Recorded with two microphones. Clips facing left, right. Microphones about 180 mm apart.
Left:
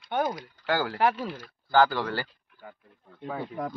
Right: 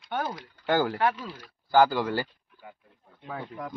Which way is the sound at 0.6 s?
15° right (ahead or behind).